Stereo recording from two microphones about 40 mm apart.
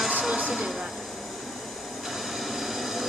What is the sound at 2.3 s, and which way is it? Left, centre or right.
Vehicle, centre.